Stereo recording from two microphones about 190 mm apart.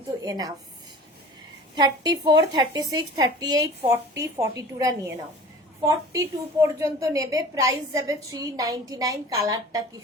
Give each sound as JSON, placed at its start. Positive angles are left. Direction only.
{"t": 0.2, "sound": "a woman's voice", "side_deg": -20}
{"t": 1.7, "sound": "a woman's voice", "side_deg": -25}